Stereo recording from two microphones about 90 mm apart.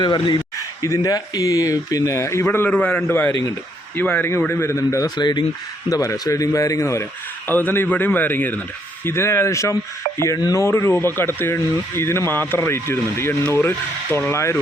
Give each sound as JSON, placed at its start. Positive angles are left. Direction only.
{"t": 0.0, "sound": "speech", "side_deg": 55}
{"t": 0.8, "sound": "speech", "side_deg": 40}
{"t": 2.6, "sound": "a man's voice", "side_deg": 15}
{"t": 5.1, "sound": "speech", "side_deg": 55}
{"t": 5.9, "sound": "speech", "side_deg": 40}